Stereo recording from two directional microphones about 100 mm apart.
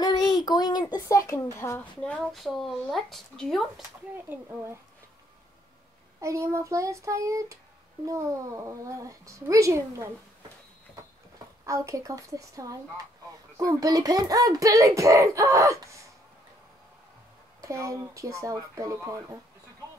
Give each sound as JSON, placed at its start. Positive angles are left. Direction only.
{"t": 0.0, "sound": "a sound", "side_deg": 45}
{"t": 1.0, "sound": "speech", "side_deg": 30}
{"t": 2.0, "sound": "a sound", "side_deg": 10}
{"t": 2.3, "sound": "speech", "side_deg": 0}
{"t": 4.3, "sound": "speech", "side_deg": -25}
{"t": 6.2, "sound": "a child's voice", "side_deg": -30}
{"t": 11.6, "sound": "a child's voice", "side_deg": -30}
{"t": 17.6, "sound": "a child's voice", "side_deg": -30}